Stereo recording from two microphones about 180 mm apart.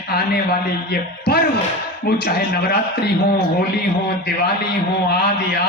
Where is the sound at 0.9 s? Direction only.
60° left (ahead or behind).